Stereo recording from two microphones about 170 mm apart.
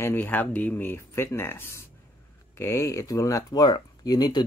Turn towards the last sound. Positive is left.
turn(degrees=25)  # may be behind; listen again after turning